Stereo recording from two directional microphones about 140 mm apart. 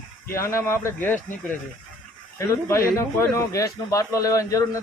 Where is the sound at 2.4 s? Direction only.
20° left (ahead or behind).